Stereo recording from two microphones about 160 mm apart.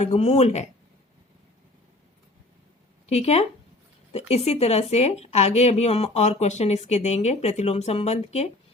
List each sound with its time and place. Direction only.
0.0 s speech: 40° left (ahead or behind)
3.1 s a woman's voice: 40° left (ahead or behind)